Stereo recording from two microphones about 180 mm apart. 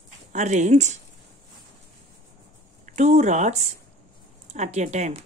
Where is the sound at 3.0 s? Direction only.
40° right (ahead or behind).